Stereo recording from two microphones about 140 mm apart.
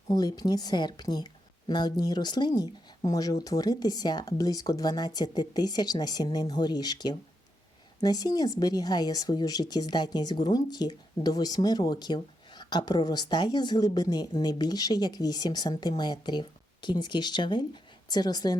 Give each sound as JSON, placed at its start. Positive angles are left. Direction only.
{"t": 0.1, "sound": "a woman's voice", "side_deg": 30}